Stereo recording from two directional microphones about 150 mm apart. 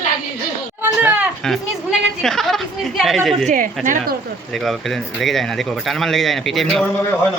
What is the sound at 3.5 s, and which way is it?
Speech, 60° right (ahead or behind).